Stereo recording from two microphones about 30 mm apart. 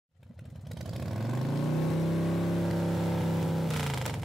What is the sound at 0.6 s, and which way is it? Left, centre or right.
Vehicle, centre.